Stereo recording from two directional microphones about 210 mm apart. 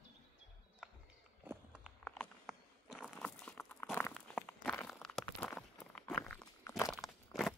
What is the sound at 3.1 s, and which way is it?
Crumpling, 5° left (ahead or behind).